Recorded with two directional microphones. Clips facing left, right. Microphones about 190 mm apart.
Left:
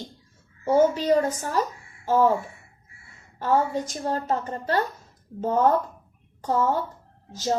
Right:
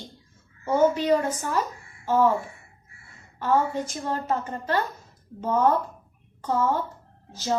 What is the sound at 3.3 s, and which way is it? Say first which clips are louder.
Speech: left 1 dB; 40° left (ahead or behind).